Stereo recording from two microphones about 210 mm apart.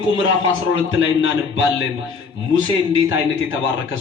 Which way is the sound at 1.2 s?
65° left (ahead or behind).